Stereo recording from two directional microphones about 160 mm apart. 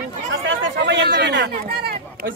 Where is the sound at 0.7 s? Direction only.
90° right; by 2.3 s 70° right (ahead or behind).